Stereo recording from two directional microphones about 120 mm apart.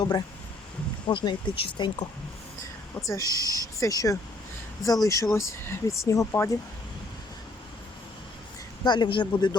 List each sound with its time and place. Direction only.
0.0 s speech: 35° left (ahead or behind)
3.1 s speech: 30° left (ahead or behind)
8.8 s speech: 35° left (ahead or behind)